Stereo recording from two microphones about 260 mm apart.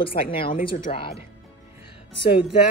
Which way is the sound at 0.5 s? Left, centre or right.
Left.